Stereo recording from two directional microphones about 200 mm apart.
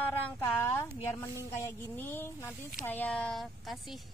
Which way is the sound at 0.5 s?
10° left (ahead or behind).